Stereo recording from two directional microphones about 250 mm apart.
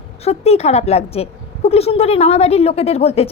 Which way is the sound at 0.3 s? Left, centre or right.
Left.